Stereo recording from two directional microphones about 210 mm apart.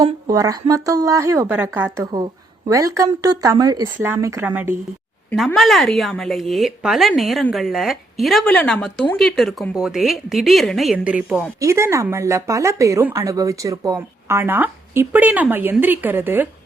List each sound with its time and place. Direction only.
0.0 s speech: 15° right (ahead or behind)
5.3 s speech: 5° left (ahead or behind)